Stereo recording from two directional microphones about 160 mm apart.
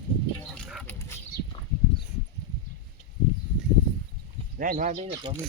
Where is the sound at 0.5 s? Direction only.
5° left (ahead or behind).